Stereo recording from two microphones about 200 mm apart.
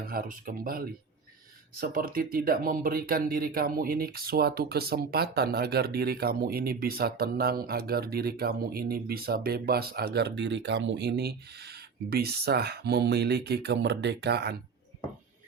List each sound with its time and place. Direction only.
0.0 s speech: 45° right (ahead or behind)